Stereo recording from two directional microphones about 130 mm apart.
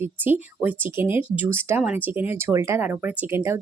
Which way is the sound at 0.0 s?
15° right (ahead or behind).